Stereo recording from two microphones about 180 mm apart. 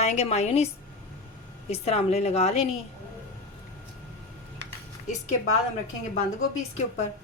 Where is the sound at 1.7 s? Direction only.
35° left (ahead or behind).